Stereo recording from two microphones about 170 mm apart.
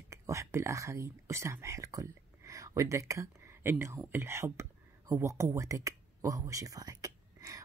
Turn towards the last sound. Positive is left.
turn(degrees=-20)  # may be behind; listen again after turning